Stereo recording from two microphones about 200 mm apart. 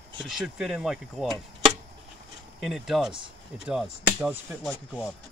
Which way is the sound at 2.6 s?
Centre (ahead or behind).